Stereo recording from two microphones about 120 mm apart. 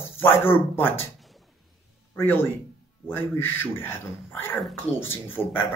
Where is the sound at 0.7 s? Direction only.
20° left (ahead or behind).